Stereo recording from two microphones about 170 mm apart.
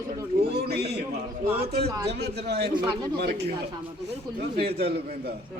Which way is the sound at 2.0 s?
75° right (ahead or behind).